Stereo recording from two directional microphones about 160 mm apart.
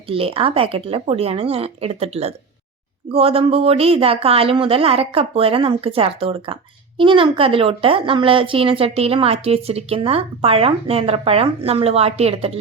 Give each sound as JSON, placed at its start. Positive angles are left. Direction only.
{"t": 0.1, "sound": "speech", "side_deg": -35}